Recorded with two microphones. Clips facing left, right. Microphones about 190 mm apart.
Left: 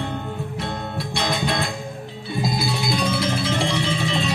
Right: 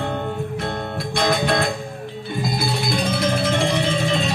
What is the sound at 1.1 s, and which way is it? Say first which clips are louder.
Music: right 5 dB; 50° right (ahead or behind).